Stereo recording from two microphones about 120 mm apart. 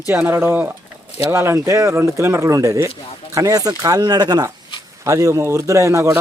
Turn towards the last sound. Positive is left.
turn(degrees=-25)  # may be behind; listen again after turning